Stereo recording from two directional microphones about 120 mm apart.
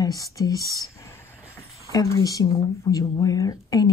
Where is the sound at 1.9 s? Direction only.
25° left (ahead or behind).